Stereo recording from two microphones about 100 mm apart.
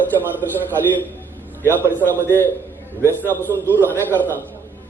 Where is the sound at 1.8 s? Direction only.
20° left (ahead or behind).